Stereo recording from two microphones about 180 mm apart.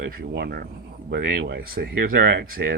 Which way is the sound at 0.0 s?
65° right (ahead or behind).